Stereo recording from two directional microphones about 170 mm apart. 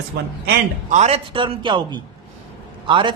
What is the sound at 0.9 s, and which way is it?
A man's voice, 40° right (ahead or behind).